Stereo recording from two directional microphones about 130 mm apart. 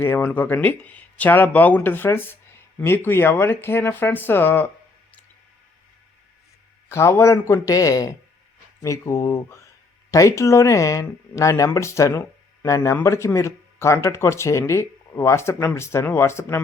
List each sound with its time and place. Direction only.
0.0 s speech: 15° left (ahead or behind)
6.8 s speech: 20° left (ahead or behind)